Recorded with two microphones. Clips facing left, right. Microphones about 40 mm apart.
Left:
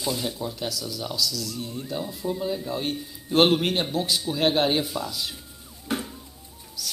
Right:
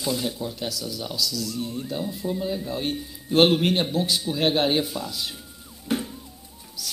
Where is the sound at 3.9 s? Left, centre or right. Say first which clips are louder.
Right 1 dB; right.